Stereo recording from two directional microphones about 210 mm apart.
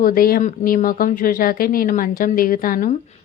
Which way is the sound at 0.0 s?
45° left (ahead or behind).